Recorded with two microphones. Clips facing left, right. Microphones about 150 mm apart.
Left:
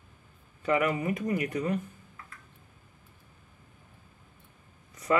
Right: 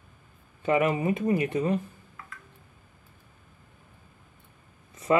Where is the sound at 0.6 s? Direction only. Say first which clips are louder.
Right 3 dB; 25° right (ahead or behind).